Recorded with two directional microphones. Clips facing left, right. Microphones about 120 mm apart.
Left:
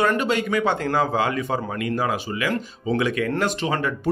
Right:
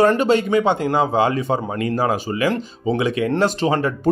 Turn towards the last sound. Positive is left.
turn(degrees=-30)  # may be behind; listen again after turning